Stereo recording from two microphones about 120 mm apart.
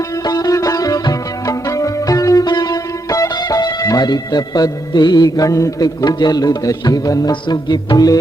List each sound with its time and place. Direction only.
0.3 s music: 30° left (ahead or behind)